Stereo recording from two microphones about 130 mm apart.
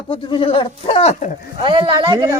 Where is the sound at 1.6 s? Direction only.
40° right (ahead or behind).